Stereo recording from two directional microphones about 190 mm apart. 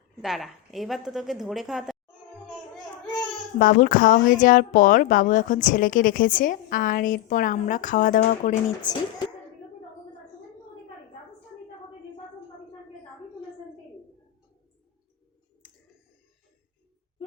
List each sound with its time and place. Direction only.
0.2 s speech: centre (ahead or behind)
3.6 s a woman's voice: 45° left (ahead or behind)
8.8 s speech: 20° left (ahead or behind)